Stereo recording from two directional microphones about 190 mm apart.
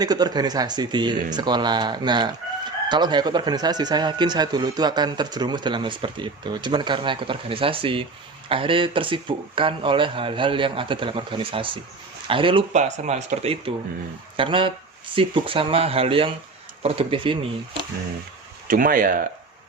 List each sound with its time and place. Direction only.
0.0 s speech: 20° right (ahead or behind)
18.7 s speech: 45° right (ahead or behind)